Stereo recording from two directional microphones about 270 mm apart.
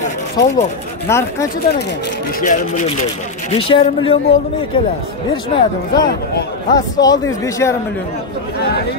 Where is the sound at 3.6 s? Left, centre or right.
Centre.